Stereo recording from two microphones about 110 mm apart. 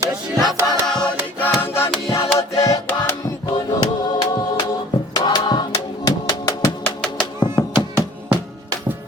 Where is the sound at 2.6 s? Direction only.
30° left (ahead or behind).